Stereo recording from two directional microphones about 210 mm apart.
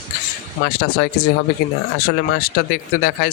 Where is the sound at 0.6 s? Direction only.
45° left (ahead or behind).